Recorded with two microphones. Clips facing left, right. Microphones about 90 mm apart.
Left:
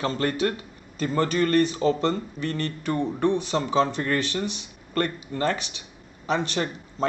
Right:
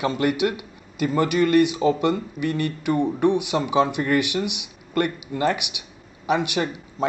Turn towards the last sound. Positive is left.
turn(degrees=-15)  # may be behind; listen again after turning